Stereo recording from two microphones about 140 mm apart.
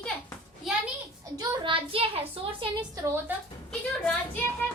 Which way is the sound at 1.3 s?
40° right (ahead or behind).